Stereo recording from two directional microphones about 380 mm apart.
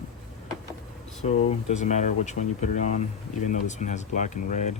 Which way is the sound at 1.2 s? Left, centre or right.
Centre.